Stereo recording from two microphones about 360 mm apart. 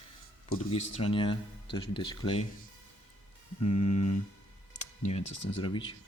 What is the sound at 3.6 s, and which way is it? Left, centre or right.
Music, left.